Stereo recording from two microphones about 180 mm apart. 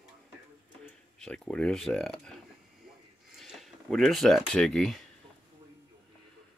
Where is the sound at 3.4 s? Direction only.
Centre (ahead or behind).